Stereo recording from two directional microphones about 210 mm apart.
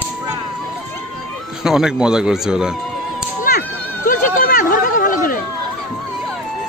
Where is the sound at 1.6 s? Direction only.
5° right (ahead or behind).